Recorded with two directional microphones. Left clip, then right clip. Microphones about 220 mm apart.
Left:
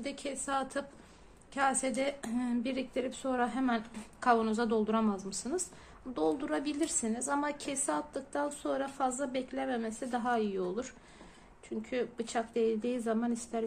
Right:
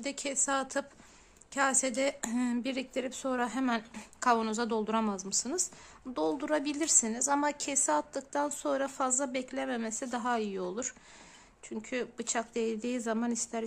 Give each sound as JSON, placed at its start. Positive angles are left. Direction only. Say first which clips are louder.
{"t": 0.0, "sound": "a woman's voice", "louder": "right 4 dB", "side_deg": -30}